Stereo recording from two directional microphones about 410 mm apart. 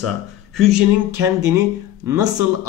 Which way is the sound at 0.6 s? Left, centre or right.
Centre.